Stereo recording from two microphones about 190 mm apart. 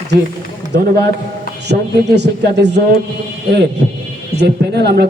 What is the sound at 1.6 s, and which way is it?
A man's voice, 60° right (ahead or behind).